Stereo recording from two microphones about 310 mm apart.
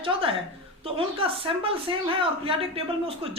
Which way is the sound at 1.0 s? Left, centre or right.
Centre.